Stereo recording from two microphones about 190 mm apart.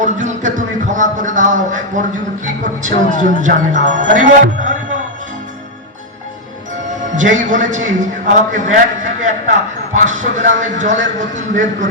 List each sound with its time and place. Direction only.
0.0 s speech: 40° right (ahead or behind)
3.2 s music: 45° right (ahead or behind)
7.2 s a man's voice: 40° right (ahead or behind)